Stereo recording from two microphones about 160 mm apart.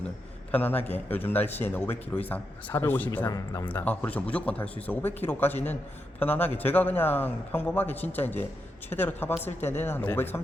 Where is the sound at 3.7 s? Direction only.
10° left (ahead or behind).